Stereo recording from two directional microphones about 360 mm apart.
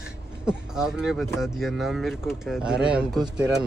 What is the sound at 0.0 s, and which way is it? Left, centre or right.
Speech, centre.